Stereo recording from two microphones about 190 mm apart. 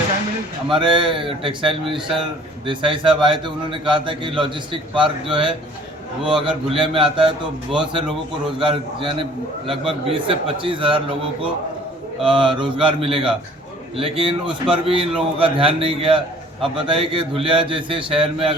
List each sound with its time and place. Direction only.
0.7 s a man's voice: 25° right (ahead or behind)
8.0 s a man's voice: centre (ahead or behind)
8.6 s a man's voice: 25° right (ahead or behind)
12.3 s a man's voice: 25° right (ahead or behind)